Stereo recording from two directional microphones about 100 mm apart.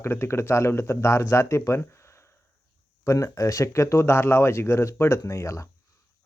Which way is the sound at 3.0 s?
30° left (ahead or behind).